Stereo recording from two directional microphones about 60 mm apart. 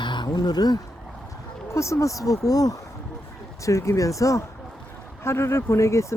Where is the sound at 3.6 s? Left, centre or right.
Left.